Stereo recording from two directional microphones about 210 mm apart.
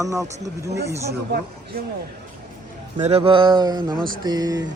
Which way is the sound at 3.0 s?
30° right (ahead or behind).